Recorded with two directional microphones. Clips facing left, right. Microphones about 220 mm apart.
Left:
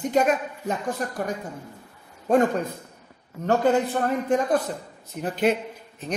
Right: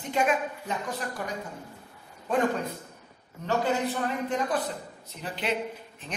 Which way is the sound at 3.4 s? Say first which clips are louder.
Left 6 dB; 50° left (ahead or behind).